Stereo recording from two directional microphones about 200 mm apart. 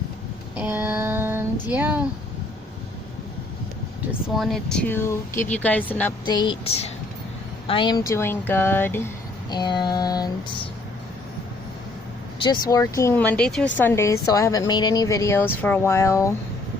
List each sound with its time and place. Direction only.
0.5 s child singing: 10° right (ahead or behind)
4.4 s a woman's voice: centre (ahead or behind)
6.2 s a sound: 20° left (ahead or behind)
7.7 s a woman's voice: 20° left (ahead or behind)
9.5 s a sound: 20° left (ahead or behind)
12.4 s a woman's voice: 20° left (ahead or behind)